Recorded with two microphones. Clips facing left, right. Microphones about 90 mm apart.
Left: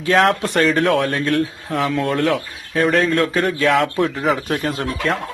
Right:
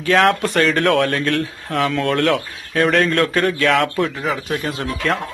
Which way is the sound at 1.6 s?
5° left (ahead or behind).